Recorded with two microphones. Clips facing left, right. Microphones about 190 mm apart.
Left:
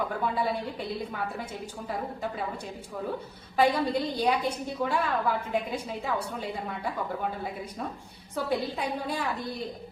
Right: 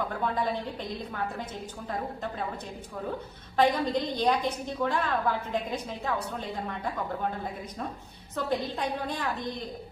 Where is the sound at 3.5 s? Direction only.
10° left (ahead or behind).